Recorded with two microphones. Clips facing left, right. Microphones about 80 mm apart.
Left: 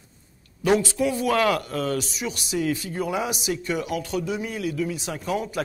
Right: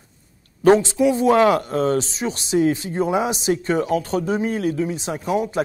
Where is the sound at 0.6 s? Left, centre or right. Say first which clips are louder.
Right 7 dB; right.